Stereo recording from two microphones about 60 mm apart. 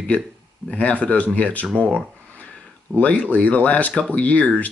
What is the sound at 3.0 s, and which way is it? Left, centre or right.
Speech, left.